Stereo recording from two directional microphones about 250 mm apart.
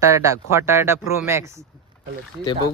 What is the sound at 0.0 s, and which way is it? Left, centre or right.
A man's voice, centre.